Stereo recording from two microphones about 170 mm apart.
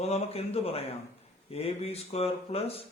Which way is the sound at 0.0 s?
35° left (ahead or behind).